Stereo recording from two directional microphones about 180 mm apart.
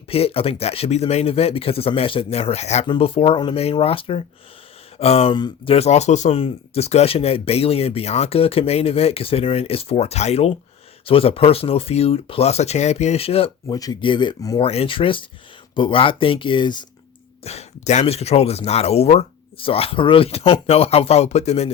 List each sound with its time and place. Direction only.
0.1 s speech: 30° left (ahead or behind)
13.7 s speech: 20° left (ahead or behind)
17.4 s speech: 35° left (ahead or behind)